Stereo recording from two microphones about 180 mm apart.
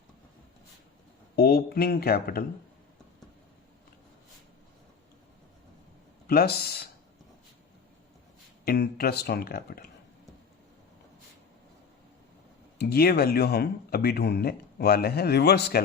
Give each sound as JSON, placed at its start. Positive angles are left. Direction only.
{"t": 1.4, "sound": "speech", "side_deg": 60}
{"t": 6.2, "sound": "speech", "side_deg": 60}
{"t": 8.6, "sound": "speech", "side_deg": 60}
{"t": 12.8, "sound": "speech", "side_deg": 60}